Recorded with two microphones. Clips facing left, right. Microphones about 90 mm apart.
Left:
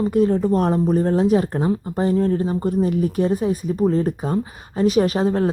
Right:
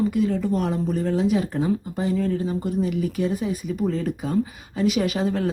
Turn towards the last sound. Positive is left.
turn(degrees=35)  # may be behind; listen again after turning